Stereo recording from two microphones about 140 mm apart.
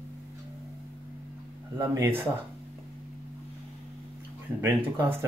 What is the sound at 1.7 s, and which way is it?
Speech, 25° right (ahead or behind).